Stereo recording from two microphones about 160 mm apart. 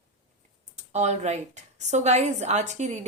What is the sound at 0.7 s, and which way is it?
A woman's voice, 45° right (ahead or behind).